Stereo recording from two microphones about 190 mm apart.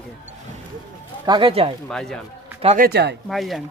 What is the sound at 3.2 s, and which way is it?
Speech, centre (ahead or behind).